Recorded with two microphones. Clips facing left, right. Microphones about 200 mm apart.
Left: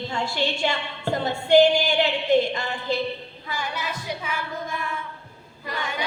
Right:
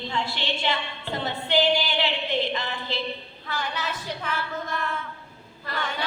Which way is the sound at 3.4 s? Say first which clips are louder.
Even; 10° left (ahead or behind).